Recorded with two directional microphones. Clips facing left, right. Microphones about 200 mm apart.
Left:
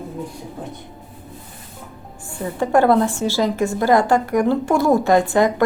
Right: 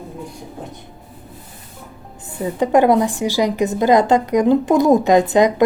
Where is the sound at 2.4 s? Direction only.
15° right (ahead or behind).